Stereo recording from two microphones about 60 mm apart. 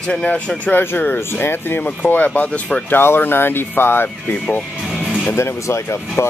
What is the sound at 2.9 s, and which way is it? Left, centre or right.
Speech, left.